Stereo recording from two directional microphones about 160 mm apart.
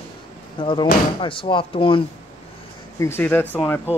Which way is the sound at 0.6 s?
30° left (ahead or behind).